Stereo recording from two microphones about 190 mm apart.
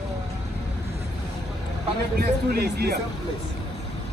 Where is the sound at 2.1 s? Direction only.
55° right (ahead or behind).